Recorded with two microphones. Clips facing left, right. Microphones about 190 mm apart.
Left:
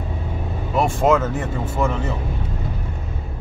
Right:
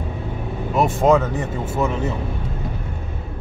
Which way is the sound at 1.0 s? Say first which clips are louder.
Right 2 dB; 15° right (ahead or behind).